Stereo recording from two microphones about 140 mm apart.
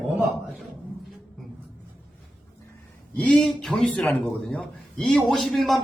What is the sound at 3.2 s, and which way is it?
A man's voice, 5° left (ahead or behind).